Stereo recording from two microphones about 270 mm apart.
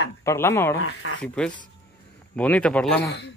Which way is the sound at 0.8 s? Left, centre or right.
Left.